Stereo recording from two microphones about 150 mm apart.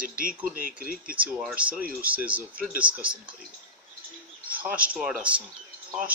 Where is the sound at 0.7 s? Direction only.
70° right (ahead or behind).